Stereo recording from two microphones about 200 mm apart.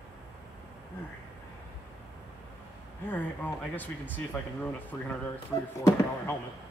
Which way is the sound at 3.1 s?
10° left (ahead or behind).